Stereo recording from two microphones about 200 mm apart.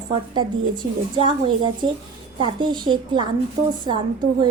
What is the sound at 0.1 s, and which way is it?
A woman's voice, 25° right (ahead or behind).